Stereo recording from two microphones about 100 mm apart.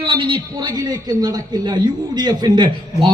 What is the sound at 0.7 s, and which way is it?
A man's voice, 40° right (ahead or behind).